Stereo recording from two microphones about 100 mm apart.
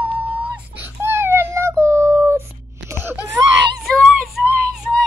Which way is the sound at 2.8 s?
25° right (ahead or behind).